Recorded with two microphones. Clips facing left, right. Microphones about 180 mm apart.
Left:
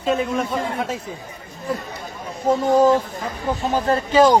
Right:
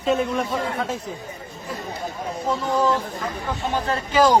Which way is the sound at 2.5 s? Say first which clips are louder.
Left 7 dB; 45° left (ahead or behind).